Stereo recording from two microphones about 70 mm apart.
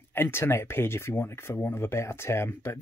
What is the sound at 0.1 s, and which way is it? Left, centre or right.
Speech, left.